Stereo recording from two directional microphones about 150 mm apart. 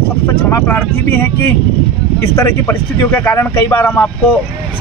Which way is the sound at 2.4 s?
15° left (ahead or behind).